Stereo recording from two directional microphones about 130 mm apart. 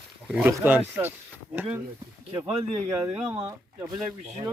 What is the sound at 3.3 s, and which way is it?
Speech, 20° right (ahead or behind).